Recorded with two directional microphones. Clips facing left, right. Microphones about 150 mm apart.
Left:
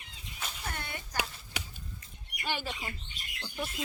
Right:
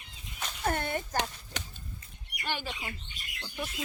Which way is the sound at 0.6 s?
50° right (ahead or behind).